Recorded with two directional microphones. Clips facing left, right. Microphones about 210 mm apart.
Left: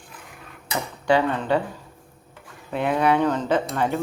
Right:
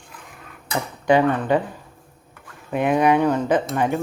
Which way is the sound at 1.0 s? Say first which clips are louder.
Right 3 dB; 20° right (ahead or behind).